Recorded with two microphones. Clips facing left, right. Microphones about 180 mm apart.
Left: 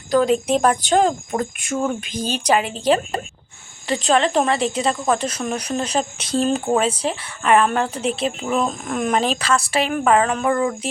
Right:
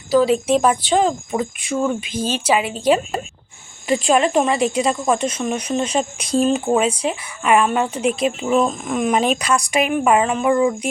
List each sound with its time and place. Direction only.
0.1 s a woman's voice: 5° right (ahead or behind)
9.5 s a woman's voice: 15° right (ahead or behind)